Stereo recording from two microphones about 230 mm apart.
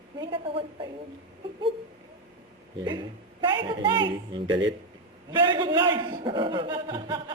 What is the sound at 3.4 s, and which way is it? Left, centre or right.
A man's voice, right.